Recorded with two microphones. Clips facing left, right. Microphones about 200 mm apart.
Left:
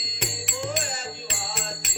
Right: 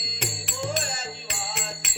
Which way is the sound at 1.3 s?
35° left (ahead or behind).